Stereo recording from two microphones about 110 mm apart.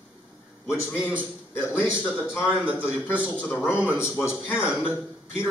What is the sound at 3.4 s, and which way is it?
Speech, 20° left (ahead or behind).